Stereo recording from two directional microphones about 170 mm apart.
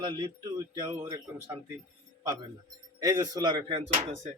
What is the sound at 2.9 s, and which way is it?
Speech, 20° right (ahead or behind).